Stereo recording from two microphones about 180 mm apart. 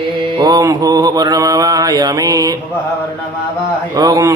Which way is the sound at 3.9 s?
20° right (ahead or behind).